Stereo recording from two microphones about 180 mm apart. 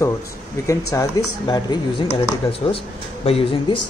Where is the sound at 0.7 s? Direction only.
20° left (ahead or behind).